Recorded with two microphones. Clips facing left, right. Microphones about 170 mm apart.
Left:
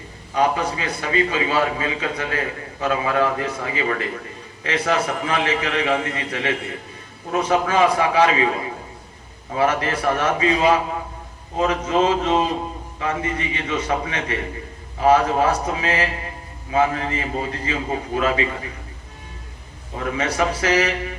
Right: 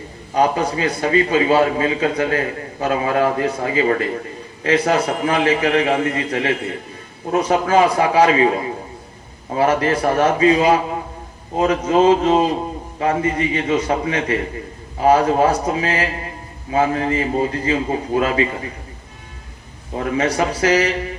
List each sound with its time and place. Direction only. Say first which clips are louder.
0.3 s a man's voice: right 3 dB; 35° right (ahead or behind)
9.6 s a man's voice: right 4 dB; 35° right (ahead or behind)
20.0 s a man's voice: right 3 dB; 35° right (ahead or behind)